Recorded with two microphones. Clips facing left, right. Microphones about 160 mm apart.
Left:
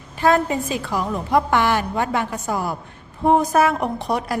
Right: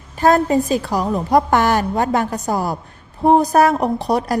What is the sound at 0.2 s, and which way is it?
A woman's voice, 40° right (ahead or behind).